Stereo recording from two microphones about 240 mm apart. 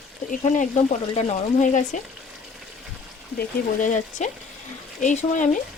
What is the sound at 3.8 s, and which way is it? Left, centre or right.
Speech, left.